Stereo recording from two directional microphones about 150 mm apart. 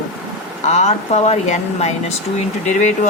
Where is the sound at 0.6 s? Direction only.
45° left (ahead or behind).